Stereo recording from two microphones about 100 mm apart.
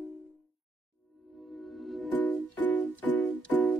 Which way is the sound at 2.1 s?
15° left (ahead or behind).